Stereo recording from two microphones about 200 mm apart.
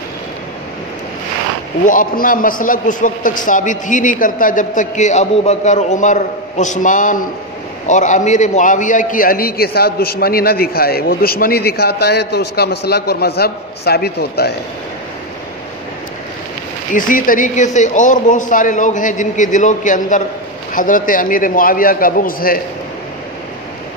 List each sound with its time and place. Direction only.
1.9 s a man's voice: 45° left (ahead or behind)
16.9 s a man's voice: 40° left (ahead or behind)